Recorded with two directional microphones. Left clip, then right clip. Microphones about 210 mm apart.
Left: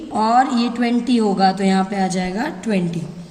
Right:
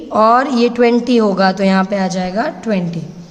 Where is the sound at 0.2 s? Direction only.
50° right (ahead or behind).